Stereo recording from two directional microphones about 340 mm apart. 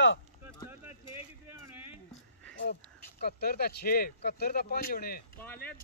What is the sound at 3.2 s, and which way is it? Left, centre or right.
Speech, left.